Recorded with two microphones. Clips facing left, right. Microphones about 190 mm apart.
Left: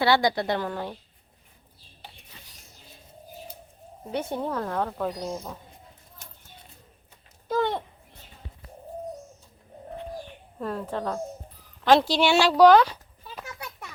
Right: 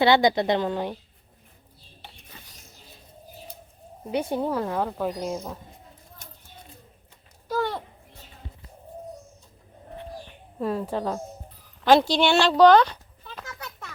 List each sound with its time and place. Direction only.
0.0 s a woman's voice: 20° right (ahead or behind)
4.1 s speech: 10° right (ahead or behind)
5.0 s a woman's voice: 20° right (ahead or behind)
7.4 s a sound: 20° left (ahead or behind)
10.6 s speech: 10° right (ahead or behind)
11.9 s a sound: centre (ahead or behind)